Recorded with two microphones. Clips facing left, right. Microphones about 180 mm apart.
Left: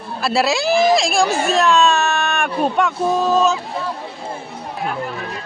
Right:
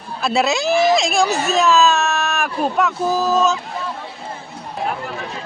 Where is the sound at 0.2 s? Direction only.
Centre (ahead or behind).